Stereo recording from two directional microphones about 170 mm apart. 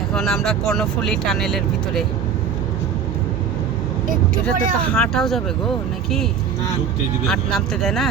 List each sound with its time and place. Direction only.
0.1 s speech: centre (ahead or behind)
4.1 s speech: 55° right (ahead or behind)
4.9 s speech: centre (ahead or behind)
7.3 s speech: centre (ahead or behind)